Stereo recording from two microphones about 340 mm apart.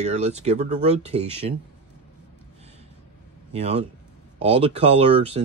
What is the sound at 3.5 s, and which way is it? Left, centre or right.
Speech, centre.